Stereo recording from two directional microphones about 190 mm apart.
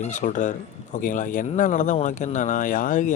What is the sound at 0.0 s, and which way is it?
Speech, 40° left (ahead or behind).